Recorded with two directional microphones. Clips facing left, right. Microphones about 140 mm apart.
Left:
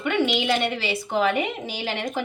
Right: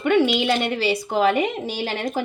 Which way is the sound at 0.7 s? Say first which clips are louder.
Right 3 dB; 40° right (ahead or behind).